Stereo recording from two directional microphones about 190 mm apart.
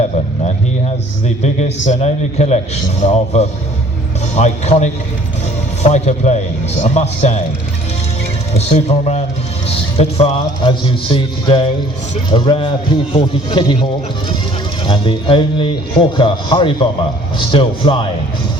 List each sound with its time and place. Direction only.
1.9 s a man's voice: 35° left (ahead or behind)
8.5 s a man's voice: 35° left (ahead or behind)
14.8 s a man's voice: 25° left (ahead or behind)